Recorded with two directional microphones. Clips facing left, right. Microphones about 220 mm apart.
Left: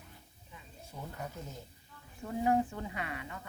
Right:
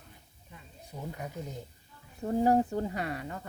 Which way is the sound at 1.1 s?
15° right (ahead or behind).